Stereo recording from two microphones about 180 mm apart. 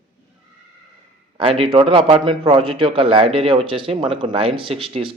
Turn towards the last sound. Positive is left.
turn(degrees=-30)  # may be behind; listen again after turning